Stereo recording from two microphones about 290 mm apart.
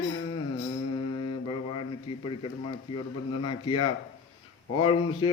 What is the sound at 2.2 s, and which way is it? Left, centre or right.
Speech, centre.